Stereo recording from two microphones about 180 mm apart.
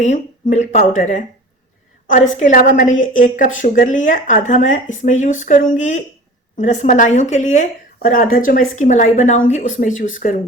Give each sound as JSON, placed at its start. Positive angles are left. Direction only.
{"t": 0.0, "sound": "speech", "side_deg": 40}